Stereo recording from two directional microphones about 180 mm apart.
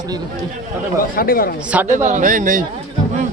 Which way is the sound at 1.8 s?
40° right (ahead or behind).